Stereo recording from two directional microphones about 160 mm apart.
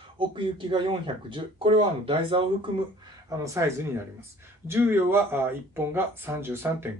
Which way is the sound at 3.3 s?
15° right (ahead or behind).